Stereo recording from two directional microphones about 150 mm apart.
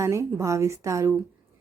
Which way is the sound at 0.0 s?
20° right (ahead or behind).